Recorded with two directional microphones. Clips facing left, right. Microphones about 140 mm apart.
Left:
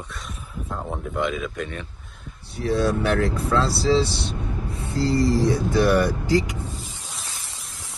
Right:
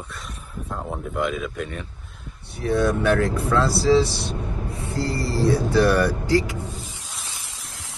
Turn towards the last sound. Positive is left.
turn(degrees=20)  # may be behind; listen again after turning